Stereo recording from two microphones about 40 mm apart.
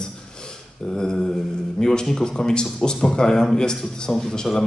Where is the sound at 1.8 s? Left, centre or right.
Centre.